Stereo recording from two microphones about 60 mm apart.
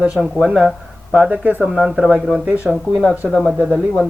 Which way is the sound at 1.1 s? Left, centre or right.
Right.